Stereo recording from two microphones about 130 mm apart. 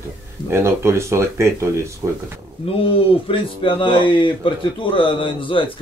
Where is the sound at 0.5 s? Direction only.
20° right (ahead or behind).